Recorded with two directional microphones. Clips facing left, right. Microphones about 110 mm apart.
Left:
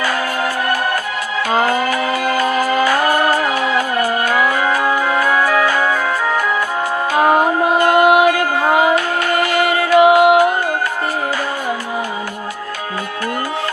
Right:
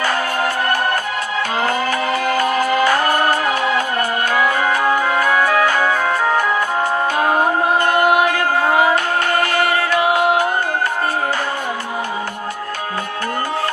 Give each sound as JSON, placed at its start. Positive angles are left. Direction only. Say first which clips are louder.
{"t": 2.3, "sound": "music", "louder": "even", "side_deg": 25}
{"t": 4.4, "sound": "music", "louder": "right 2 dB", "side_deg": -30}
{"t": 7.2, "sound": "mantra", "louder": "left 5 dB", "side_deg": 20}
{"t": 9.6, "sound": "music", "louder": "left 5 dB", "side_deg": 20}